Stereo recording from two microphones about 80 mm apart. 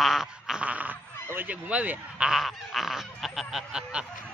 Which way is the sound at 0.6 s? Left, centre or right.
Centre.